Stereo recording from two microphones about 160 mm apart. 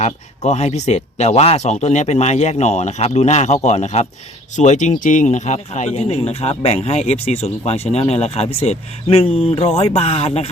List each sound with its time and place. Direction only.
0.0 s speech: 45° left (ahead or behind)